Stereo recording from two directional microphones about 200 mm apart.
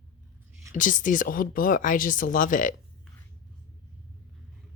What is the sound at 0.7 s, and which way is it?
Speech, 40° left (ahead or behind).